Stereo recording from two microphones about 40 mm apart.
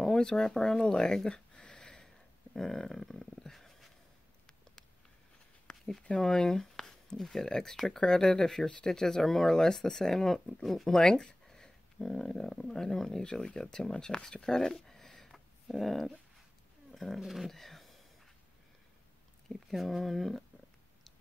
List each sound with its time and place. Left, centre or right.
0.0 s speech: centre
0.8 s a sound: centre
2.5 s speech: centre
6.1 s speech: centre
16.9 s dog: centre
17.2 s speech: centre
19.5 s speech: centre